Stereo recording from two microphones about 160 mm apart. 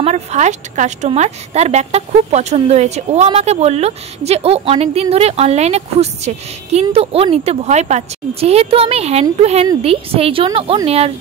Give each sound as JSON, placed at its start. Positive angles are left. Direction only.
{"t": 0.0, "sound": "a woman's voice", "side_deg": -45}